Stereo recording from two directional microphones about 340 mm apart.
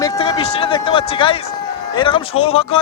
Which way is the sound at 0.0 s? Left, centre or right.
Centre.